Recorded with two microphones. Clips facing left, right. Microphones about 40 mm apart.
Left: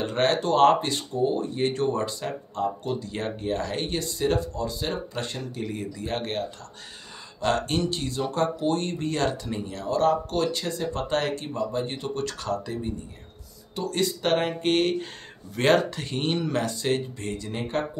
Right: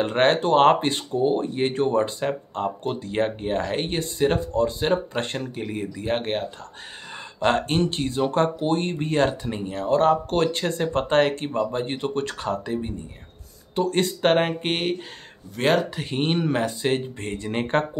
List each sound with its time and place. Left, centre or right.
0.0 s speech: right
5.5 s speech: right
7.4 s speech: right
13.7 s speech: right; by 15.0 s centre
15.5 s speech: centre
15.9 s speech: centre
17.5 s speech: right